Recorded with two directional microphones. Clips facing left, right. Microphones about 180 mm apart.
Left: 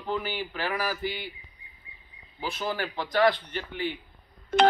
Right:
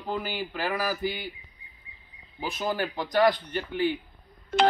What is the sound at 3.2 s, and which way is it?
Speech, 40° right (ahead or behind).